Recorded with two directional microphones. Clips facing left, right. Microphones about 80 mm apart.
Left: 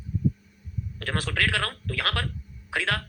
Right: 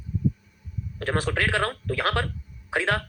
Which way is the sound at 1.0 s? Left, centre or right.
Right.